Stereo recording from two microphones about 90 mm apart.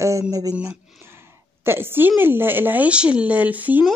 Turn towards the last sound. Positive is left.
turn(degrees=-20)  # may be behind; listen again after turning